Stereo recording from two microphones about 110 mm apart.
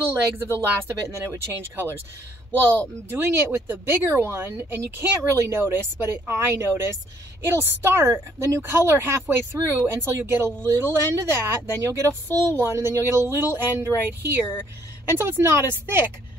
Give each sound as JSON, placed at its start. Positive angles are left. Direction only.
{"t": 0.6, "sound": "speech", "side_deg": -25}
{"t": 3.1, "sound": "speech", "side_deg": -20}